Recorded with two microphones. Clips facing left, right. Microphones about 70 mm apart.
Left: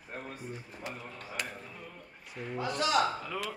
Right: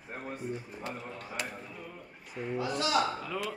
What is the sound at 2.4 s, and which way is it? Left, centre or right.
Speech, centre.